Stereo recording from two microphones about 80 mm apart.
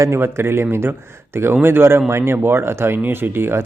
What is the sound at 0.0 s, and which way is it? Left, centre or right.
Speech, right.